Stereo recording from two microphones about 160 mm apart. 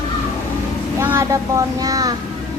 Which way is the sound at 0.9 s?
15° right (ahead or behind).